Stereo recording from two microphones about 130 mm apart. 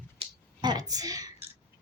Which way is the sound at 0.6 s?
30° right (ahead or behind).